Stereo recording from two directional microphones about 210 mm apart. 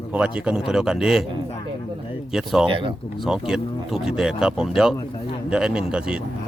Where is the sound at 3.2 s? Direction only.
5° right (ahead or behind).